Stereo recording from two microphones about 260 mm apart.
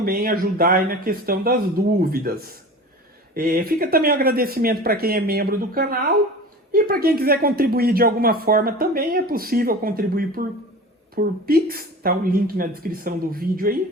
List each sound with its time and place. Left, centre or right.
0.0 s speech: right